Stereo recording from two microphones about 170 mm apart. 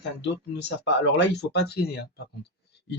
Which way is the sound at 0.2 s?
90° left.